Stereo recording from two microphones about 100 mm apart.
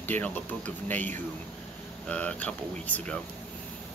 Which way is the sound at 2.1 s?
15° left (ahead or behind).